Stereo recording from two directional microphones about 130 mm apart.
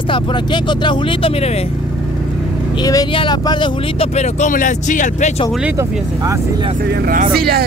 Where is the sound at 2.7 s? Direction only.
30° left (ahead or behind); by 5.4 s 65° left (ahead or behind).